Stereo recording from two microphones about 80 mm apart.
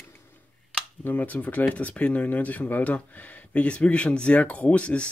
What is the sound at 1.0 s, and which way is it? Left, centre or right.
Speech, left.